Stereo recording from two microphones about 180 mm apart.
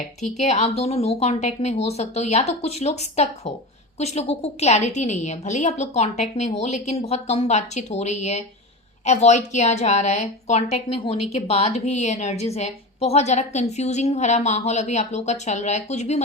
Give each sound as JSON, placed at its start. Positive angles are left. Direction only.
{"t": 0.3, "sound": "a woman's voice", "side_deg": 35}